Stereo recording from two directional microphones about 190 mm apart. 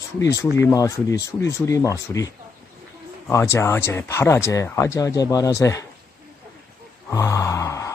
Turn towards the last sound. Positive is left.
turn(degrees=15)  # may be behind; listen again after turning